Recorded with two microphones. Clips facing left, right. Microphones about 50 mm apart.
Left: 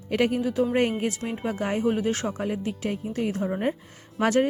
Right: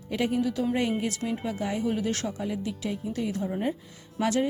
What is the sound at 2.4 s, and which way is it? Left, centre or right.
Speech, left.